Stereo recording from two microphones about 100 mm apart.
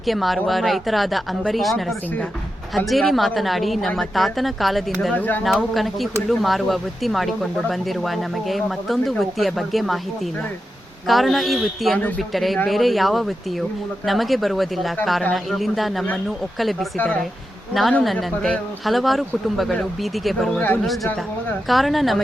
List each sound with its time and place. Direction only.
0.0 s speech: centre (ahead or behind)
5.1 s speech: 20° left (ahead or behind)
5.4 s speech: centre (ahead or behind)
11.0 s speech: centre (ahead or behind)
11.9 s speech: 15° left (ahead or behind)
12.3 s speech: centre (ahead or behind)
18.0 s speech: centre (ahead or behind)